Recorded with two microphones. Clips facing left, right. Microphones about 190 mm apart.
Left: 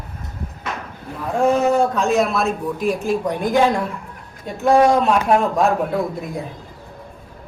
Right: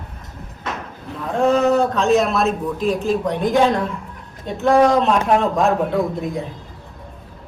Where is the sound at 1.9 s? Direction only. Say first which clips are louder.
Right 2 dB; centre (ahead or behind).